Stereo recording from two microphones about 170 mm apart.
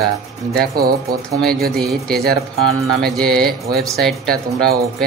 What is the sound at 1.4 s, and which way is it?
Music, 5° left (ahead or behind).